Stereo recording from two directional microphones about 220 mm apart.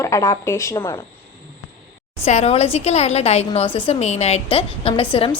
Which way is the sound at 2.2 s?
30° left (ahead or behind).